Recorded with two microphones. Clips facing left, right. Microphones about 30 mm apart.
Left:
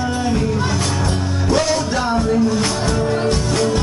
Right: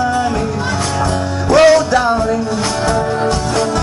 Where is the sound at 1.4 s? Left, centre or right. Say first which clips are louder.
Right 10 dB; right.